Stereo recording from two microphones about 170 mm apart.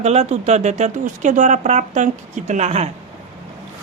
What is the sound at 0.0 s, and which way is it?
Speech, 40° right (ahead or behind).